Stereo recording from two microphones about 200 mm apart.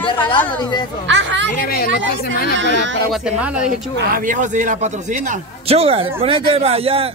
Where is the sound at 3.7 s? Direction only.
40° right (ahead or behind).